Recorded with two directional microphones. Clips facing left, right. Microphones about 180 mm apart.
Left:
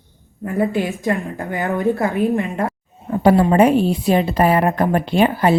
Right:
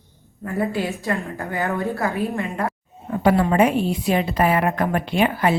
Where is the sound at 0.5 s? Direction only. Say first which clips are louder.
Left 4 dB; 20° left (ahead or behind).